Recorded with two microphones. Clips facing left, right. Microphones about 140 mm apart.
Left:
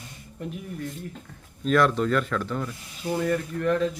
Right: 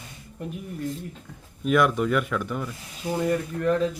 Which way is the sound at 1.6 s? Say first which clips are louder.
Even; 10° right (ahead or behind).